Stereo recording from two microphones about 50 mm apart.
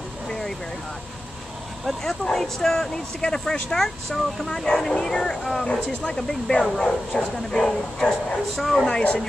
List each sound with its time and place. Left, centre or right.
2.0 s speech: centre
8.8 s speech: left